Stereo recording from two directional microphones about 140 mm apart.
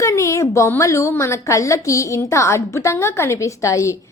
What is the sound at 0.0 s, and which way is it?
A woman's voice, 20° left (ahead or behind).